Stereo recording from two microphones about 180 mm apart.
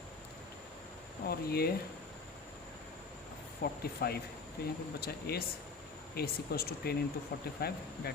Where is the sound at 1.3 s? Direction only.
60° left (ahead or behind).